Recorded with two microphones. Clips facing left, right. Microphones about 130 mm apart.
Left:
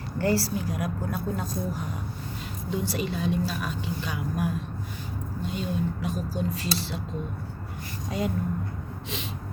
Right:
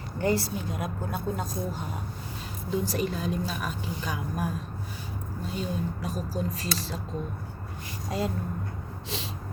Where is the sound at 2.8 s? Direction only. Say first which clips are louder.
Left 1 dB; 40° right (ahead or behind).